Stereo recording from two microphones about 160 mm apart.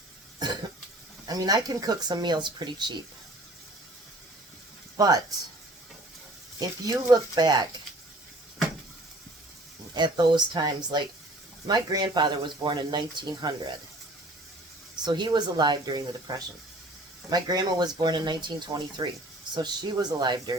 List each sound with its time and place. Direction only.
1.3 s speech: 25° right (ahead or behind)
4.9 s speech: 25° right (ahead or behind)
6.6 s speech: 25° right (ahead or behind)
9.9 s speech: 30° right (ahead or behind)
15.0 s speech: 25° right (ahead or behind)